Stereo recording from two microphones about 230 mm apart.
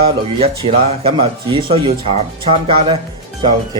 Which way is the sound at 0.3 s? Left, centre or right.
Right.